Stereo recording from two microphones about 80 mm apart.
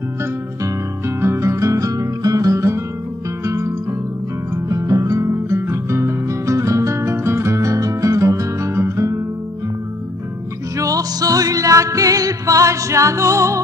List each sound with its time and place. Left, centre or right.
0.2 s music: right
10.8 s music: right